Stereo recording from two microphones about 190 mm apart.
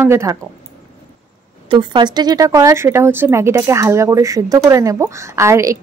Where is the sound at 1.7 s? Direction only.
25° right (ahead or behind).